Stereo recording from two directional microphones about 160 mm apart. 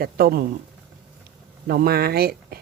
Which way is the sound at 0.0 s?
70° right (ahead or behind).